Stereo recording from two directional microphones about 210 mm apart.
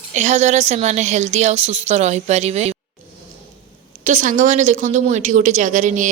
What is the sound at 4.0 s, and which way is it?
Speech, 35° right (ahead or behind).